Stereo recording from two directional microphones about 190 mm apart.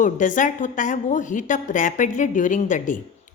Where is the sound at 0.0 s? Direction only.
40° left (ahead or behind).